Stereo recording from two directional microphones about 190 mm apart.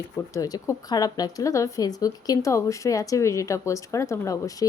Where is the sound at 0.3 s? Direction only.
20° left (ahead or behind).